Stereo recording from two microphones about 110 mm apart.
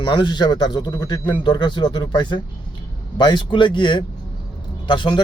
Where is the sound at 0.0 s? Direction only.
40° left (ahead or behind).